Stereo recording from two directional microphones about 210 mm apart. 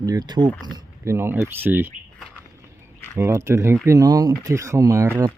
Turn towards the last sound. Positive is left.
turn(degrees=-15)  # may be behind; listen again after turning